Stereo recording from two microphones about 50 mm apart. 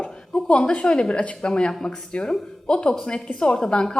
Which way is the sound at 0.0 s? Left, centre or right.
Left.